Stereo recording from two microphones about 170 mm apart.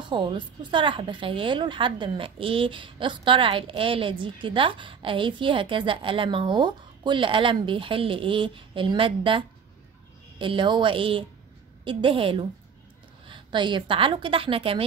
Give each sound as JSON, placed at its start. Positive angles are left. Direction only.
{"t": 0.0, "sound": "a woman's voice", "side_deg": -30}
{"t": 10.4, "sound": "a woman's voice", "side_deg": -30}